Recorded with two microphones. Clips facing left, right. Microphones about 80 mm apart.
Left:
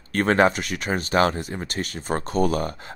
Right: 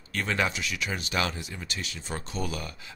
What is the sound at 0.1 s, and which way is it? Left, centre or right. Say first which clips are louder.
Speech: left 10 dB; left.